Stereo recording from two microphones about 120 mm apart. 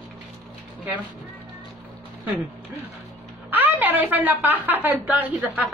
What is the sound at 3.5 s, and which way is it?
A woman's voice, 15° right (ahead or behind).